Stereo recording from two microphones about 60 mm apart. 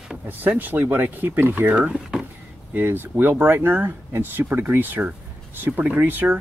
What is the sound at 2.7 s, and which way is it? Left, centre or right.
Speech, right.